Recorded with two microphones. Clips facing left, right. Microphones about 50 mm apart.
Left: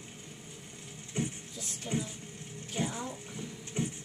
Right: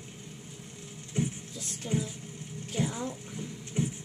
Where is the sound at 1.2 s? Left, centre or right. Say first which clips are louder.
Right 3 dB; centre.